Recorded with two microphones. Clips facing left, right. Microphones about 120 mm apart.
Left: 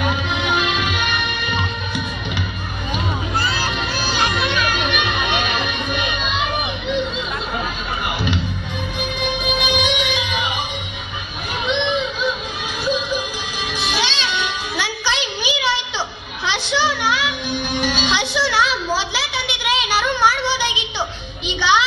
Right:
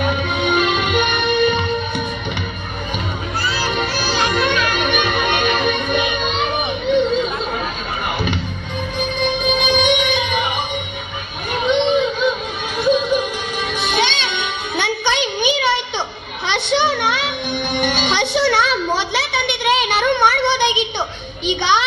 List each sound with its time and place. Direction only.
0.0 s music: 55° right (ahead or behind)
4.3 s music: 50° right (ahead or behind)
6.9 s chatter: 50° right (ahead or behind)
9.7 s music: 55° right (ahead or behind)
11.5 s a sound: 50° right (ahead or behind)
12.8 s music: 55° right (ahead or behind)